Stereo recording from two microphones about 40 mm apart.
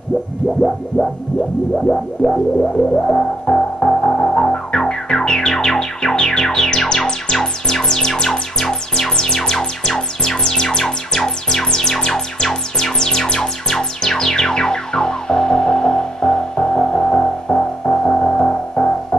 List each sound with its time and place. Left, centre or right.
0.6 s music: centre
2.3 s music: centre